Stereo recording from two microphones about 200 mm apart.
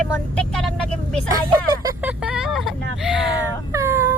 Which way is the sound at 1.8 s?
15° right (ahead or behind).